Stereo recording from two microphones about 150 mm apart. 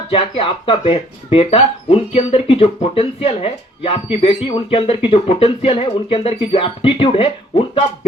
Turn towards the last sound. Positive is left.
turn(degrees=40)  # may be behind; listen again after turning